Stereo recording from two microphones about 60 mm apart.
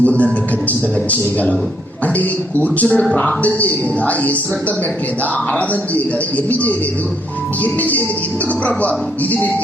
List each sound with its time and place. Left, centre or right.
0.0 s speech: left
5.5 s speech: left